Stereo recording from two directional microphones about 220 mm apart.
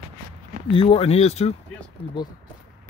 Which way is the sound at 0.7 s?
25° left (ahead or behind).